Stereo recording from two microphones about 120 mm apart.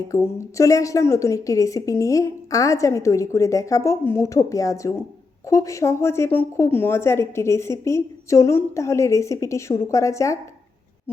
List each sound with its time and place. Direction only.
0.1 s a woman's voice: 25° left (ahead or behind)